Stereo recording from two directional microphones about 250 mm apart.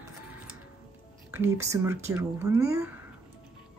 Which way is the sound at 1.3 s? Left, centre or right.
Centre.